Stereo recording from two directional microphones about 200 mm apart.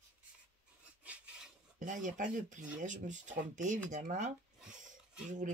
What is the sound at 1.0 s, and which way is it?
Filing, 5° right (ahead or behind).